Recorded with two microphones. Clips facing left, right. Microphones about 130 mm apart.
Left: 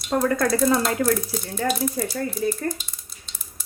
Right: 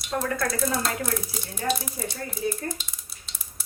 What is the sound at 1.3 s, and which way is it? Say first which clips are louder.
Speech: left 4 dB; centre (ahead or behind).